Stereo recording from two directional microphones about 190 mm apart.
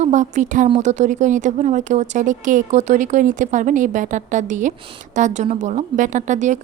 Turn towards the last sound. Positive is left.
turn(degrees=-40)  # may be behind; listen again after turning